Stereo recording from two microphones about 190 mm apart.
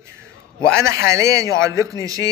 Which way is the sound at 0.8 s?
15° right (ahead or behind).